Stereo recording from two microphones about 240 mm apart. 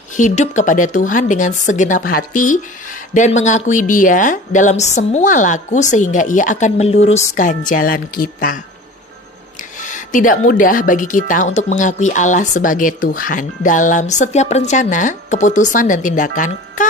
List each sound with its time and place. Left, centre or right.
0.1 s a woman's voice: left